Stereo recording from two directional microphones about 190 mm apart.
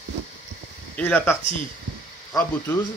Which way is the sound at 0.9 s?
5° left (ahead or behind).